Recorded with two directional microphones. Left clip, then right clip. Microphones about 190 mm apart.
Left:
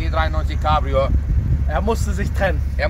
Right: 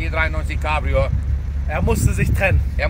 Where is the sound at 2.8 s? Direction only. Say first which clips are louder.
Left 1 dB; 5° right (ahead or behind).